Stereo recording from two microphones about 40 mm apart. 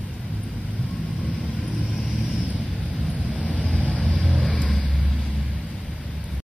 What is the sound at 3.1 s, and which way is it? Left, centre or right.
Vehicle, right.